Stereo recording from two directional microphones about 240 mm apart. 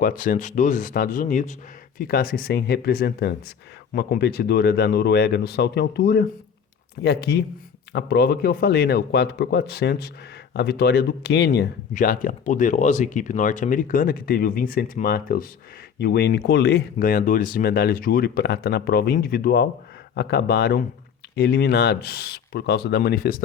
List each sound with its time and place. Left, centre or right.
0.0 s speech: left